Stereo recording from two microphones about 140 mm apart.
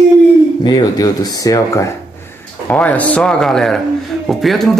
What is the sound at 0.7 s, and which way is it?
Speech, 25° left (ahead or behind).